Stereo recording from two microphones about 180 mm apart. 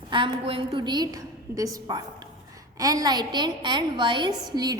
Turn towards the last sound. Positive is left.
turn(degrees=-25)  # may be behind; listen again after turning